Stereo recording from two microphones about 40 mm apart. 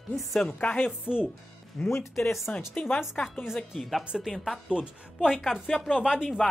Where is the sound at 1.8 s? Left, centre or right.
Centre.